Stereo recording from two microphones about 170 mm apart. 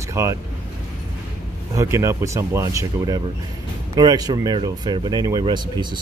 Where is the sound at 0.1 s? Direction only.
15° right (ahead or behind).